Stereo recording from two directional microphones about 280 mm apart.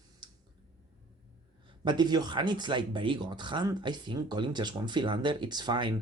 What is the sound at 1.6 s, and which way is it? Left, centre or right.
Speech, centre.